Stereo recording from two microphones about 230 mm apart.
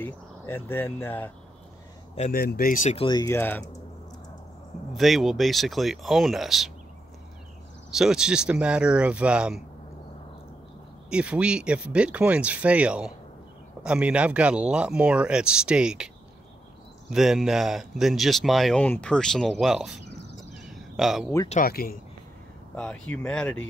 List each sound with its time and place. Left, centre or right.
0.0 s speech: centre
2.1 s speech: left
2.4 s speech: left; by 3.7 s centre
4.9 s speech: centre
7.9 s speech: centre
11.1 s speech: centre
17.1 s speech: centre
20.3 s a sound: centre
21.5 s speech: left
22.8 s speech: centre